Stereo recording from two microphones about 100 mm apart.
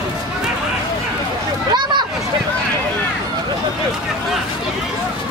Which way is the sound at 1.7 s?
50° right (ahead or behind).